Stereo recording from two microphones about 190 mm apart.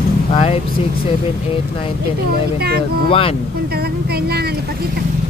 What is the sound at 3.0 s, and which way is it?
Speech, 30° left (ahead or behind).